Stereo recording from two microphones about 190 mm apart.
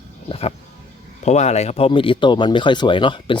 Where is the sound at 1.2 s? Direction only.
35° left (ahead or behind).